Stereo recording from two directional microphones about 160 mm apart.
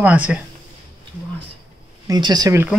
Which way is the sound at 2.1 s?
25° right (ahead or behind).